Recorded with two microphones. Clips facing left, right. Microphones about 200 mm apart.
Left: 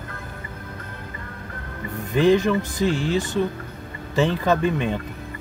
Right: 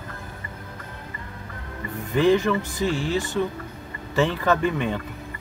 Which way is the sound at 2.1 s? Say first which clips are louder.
Left 2 dB; 15° left (ahead or behind).